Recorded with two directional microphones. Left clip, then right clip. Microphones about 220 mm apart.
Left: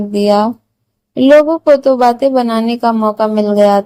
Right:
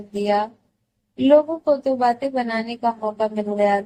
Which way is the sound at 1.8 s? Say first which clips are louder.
Left 10 dB; 35° left (ahead or behind).